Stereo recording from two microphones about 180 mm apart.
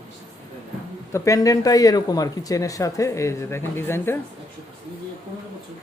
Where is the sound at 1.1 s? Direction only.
20° left (ahead or behind).